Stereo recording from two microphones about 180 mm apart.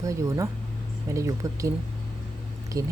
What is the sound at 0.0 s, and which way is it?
Speech, 15° right (ahead or behind).